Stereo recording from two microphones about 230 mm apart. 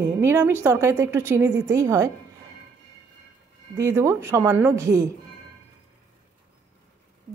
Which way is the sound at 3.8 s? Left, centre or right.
Centre.